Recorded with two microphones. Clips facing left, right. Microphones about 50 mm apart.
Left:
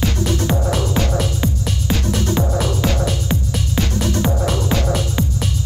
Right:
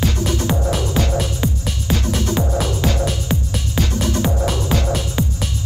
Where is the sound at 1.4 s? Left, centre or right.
Centre.